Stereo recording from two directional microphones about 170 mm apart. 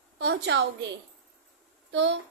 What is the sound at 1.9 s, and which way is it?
Speech, 90° right.